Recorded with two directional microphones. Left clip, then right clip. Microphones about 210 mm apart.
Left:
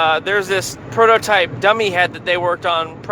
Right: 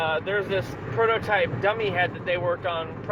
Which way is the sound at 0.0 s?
50° left (ahead or behind).